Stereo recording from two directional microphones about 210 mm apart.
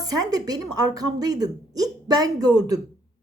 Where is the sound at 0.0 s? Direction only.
15° right (ahead or behind).